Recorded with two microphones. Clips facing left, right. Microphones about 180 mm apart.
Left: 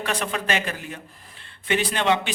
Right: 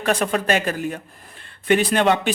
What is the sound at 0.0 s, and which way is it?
A man's voice, 45° right (ahead or behind).